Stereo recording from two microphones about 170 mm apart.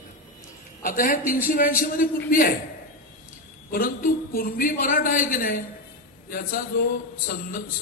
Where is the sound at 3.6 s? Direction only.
60° left (ahead or behind).